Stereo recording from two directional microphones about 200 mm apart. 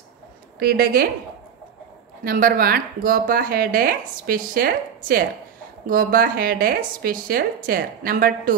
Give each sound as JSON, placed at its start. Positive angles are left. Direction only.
{"t": 0.6, "sound": "speech", "side_deg": -50}
{"t": 2.2, "sound": "speech", "side_deg": -45}